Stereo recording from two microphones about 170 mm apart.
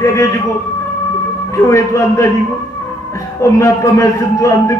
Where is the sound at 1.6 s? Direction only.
15° left (ahead or behind).